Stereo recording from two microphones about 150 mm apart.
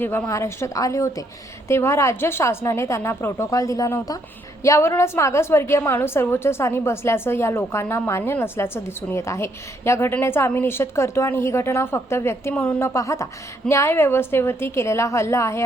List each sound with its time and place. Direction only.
0.0 s a woman's voice: 15° left (ahead or behind)